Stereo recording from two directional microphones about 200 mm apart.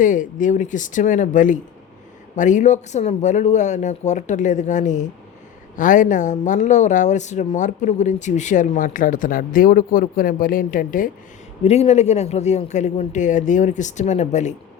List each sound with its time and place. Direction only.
0.0 s speech: 40° left (ahead or behind)
11.6 s speech: 30° left (ahead or behind)